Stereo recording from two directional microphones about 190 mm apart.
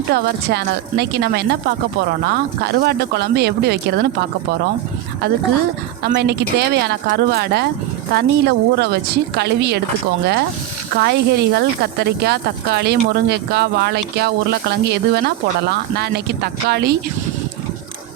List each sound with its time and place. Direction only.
0.1 s speech: 60° right (ahead or behind)
6.0 s speech: 60° right (ahead or behind)
10.9 s speech: 60° right (ahead or behind)